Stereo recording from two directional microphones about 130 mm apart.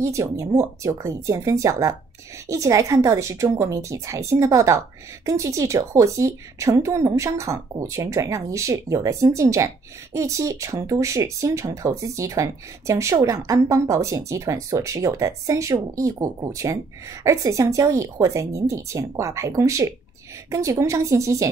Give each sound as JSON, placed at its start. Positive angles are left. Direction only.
{"t": 0.0, "sound": "a woman's voice", "side_deg": -25}